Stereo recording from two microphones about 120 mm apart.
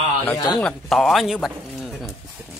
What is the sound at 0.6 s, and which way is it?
Speech, 5° left (ahead or behind).